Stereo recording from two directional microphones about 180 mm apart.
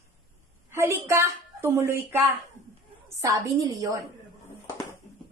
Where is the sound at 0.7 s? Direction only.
15° right (ahead or behind).